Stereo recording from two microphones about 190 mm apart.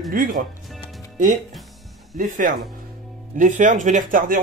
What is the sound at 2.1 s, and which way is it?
Speech, 45° right (ahead or behind).